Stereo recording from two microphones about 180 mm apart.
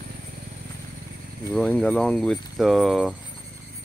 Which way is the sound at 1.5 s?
5° left (ahead or behind).